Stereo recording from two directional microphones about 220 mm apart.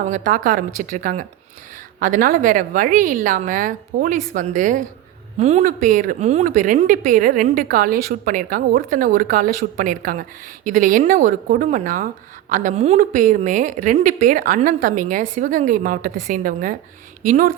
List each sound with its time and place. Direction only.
0.1 s a woman's voice: 35° right (ahead or behind)